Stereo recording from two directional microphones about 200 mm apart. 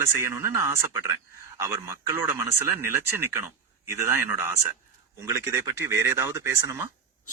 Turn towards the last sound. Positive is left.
turn(degrees=-15)  # may be behind; listen again after turning